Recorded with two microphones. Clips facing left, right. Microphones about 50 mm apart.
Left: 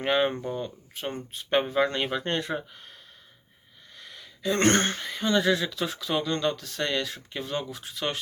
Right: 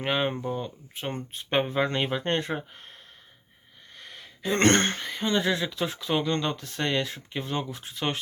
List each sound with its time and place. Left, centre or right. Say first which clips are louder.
0.0 s speech: left 2 dB; centre
1.5 s speech: left 1 dB; right
3.9 s a sound: right 1 dB; right
4.5 s speech: right 1 dB; right